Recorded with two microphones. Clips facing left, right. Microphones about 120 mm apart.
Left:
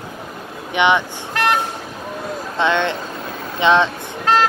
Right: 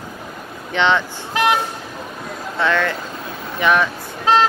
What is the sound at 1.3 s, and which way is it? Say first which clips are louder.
Vehicle: right 1 dB; 5° right (ahead or behind).